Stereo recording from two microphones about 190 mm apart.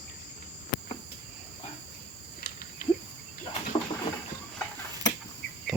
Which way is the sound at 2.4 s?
55° left (ahead or behind).